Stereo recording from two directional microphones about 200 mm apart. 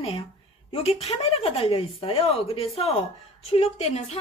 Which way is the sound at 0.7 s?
30° left (ahead or behind).